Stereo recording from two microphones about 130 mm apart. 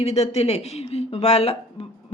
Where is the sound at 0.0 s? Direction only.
55° left (ahead or behind).